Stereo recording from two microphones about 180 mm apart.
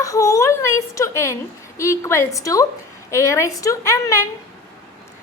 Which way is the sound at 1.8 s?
15° left (ahead or behind).